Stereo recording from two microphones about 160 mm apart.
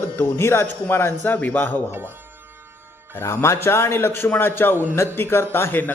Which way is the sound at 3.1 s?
15° left (ahead or behind).